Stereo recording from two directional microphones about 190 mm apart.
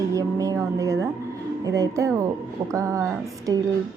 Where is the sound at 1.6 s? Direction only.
15° right (ahead or behind).